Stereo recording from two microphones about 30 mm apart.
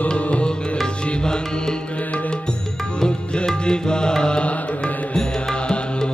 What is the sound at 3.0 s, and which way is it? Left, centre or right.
Music, left.